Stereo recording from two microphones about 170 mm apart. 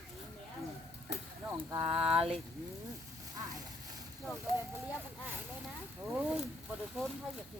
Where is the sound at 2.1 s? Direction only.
5° right (ahead or behind).